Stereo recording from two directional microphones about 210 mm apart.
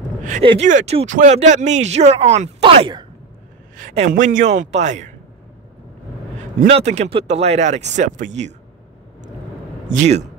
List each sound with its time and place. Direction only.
0.2 s speech: 35° right (ahead or behind)
3.7 s speech: 35° right (ahead or behind)
6.6 s speech: 35° right (ahead or behind)
9.8 s speech: 35° right (ahead or behind)